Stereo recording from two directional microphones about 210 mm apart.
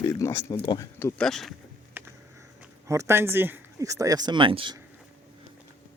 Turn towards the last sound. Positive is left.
turn(degrees=-25)  # may be behind; listen again after turning